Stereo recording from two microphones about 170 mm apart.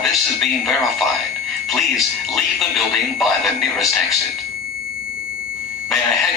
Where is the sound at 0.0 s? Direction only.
Centre (ahead or behind).